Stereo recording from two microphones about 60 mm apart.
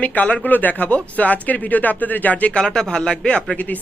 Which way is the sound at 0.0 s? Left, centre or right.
Left.